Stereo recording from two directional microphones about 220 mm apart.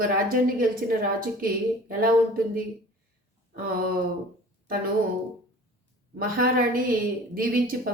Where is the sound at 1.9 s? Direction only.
45° right (ahead or behind).